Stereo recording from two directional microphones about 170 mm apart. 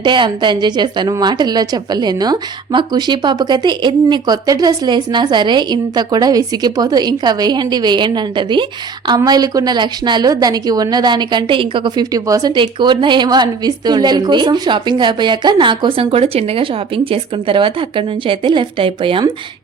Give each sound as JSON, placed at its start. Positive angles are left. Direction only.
{"t": 0.0, "sound": "a woman's voice", "side_deg": -25}